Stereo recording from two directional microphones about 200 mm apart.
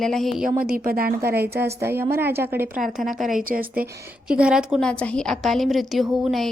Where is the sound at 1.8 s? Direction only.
10° right (ahead or behind).